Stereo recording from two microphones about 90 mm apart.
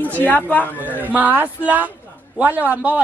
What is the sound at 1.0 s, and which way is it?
A man's voice, 20° right (ahead or behind).